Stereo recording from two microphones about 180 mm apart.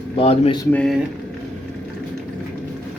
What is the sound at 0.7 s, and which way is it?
Speech, 5° left (ahead or behind).